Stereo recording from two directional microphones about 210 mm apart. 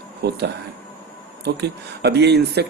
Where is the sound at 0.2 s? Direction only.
50° right (ahead or behind).